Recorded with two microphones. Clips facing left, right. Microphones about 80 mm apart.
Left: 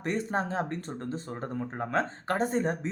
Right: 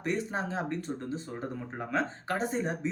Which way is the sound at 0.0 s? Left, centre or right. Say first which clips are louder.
Left 2 dB; left.